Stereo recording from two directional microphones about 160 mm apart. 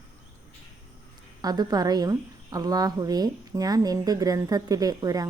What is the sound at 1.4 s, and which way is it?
A woman's voice, 25° right (ahead or behind).